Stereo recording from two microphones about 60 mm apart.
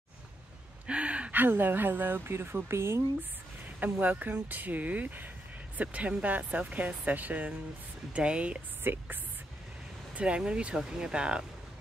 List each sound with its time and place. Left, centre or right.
0.8 s gasp: centre
1.4 s speech: right
3.6 s speech: right
8.8 s speech: right
10.1 s speech: centre